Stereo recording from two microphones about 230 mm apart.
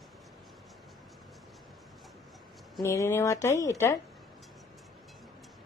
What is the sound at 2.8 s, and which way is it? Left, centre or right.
A woman's voice, centre.